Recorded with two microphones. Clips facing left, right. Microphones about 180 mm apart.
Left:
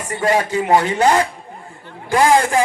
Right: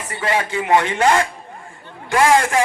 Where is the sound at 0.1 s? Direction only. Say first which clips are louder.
Left 4 dB; 45° left (ahead or behind).